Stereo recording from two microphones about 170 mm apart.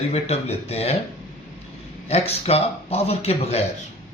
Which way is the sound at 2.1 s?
35° left (ahead or behind).